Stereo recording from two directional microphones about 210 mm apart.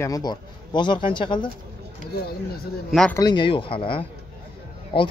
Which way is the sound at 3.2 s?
20° left (ahead or behind).